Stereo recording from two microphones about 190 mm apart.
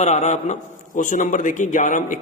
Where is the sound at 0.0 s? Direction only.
35° left (ahead or behind).